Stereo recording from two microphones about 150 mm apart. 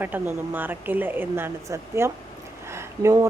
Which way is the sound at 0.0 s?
10° right (ahead or behind).